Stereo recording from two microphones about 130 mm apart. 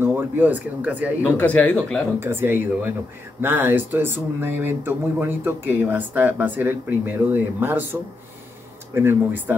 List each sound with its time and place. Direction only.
0.0 s speech: 15° right (ahead or behind)
1.2 s speech: 15° left (ahead or behind)
2.1 s speech: 20° right (ahead or behind)